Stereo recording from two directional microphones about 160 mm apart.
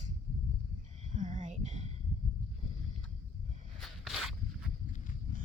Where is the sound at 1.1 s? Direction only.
50° right (ahead or behind).